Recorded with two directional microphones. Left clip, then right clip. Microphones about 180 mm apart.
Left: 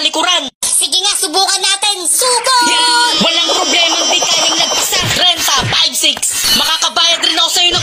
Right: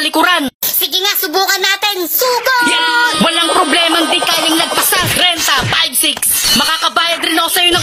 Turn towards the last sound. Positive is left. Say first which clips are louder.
# even
turn(degrees=-25)  # may be behind; listen again after turning